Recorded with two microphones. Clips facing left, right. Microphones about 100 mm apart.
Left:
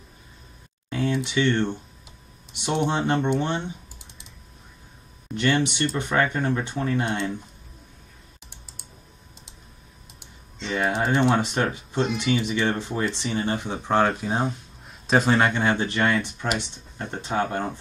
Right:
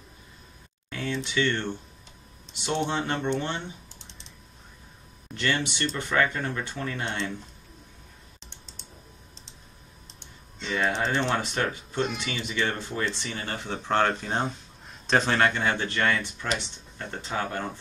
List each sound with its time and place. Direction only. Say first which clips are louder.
1.1 s speech: left 3 dB; 20° left (ahead or behind)
3.3 s typing: left 5 dB; 20° left (ahead or behind)
5.3 s speech: left 6 dB; 20° left (ahead or behind)
8.5 s typing: even; 10° left (ahead or behind)
10.8 s speech: left 4 dB; 10° left (ahead or behind)